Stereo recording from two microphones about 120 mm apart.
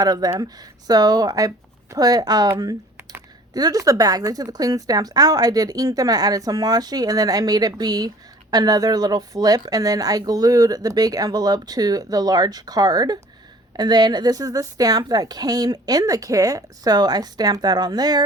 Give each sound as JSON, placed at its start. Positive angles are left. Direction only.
{"t": 0.0, "sound": "speech", "side_deg": -30}
{"t": 3.5, "sound": "speech", "side_deg": -30}